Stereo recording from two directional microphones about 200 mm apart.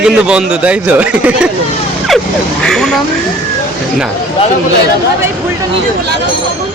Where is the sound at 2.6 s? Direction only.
Centre (ahead or behind).